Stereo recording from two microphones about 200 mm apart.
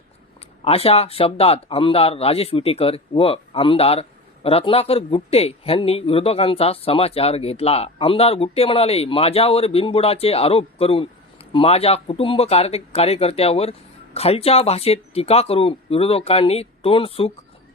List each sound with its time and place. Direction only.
0.6 s speech: 30° left (ahead or behind)